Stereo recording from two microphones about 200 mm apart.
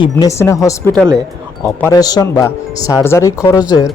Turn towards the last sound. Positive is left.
turn(degrees=20)  # may be behind; listen again after turning